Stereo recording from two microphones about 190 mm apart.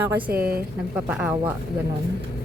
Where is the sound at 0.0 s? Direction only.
10° right (ahead or behind).